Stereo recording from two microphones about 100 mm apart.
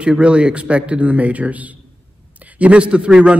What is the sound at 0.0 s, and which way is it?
A man's voice, 10° right (ahead or behind).